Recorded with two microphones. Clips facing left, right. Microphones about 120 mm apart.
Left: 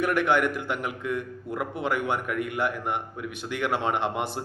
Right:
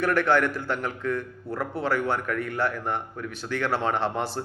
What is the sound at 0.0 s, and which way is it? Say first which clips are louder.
A man's voice: right 1 dB; 15° left (ahead or behind).